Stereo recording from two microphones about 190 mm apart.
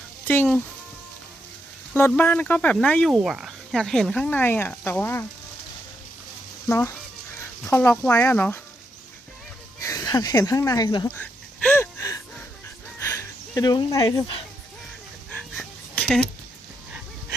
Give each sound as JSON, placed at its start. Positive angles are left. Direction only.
{"t": 1.9, "sound": "speech", "side_deg": 10}
{"t": 6.7, "sound": "speech", "side_deg": 15}
{"t": 9.8, "sound": "speech", "side_deg": 20}
{"t": 11.1, "sound": "a sound", "side_deg": 10}
{"t": 15.3, "sound": "dog", "side_deg": 5}